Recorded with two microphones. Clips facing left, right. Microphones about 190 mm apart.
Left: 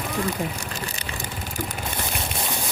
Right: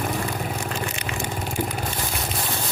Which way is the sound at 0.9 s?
35° left (ahead or behind).